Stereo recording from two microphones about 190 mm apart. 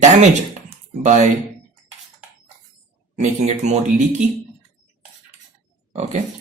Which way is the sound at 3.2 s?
35° right (ahead or behind).